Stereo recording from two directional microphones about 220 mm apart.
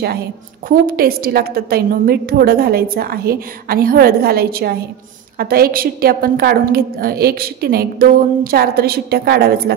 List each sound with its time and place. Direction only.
0.7 s a woman's voice: 40° right (ahead or behind)